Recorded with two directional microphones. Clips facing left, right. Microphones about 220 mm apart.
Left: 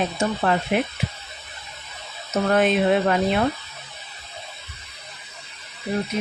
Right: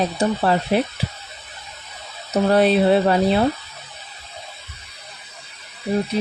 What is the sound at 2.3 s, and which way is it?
Speech, 35° right (ahead or behind).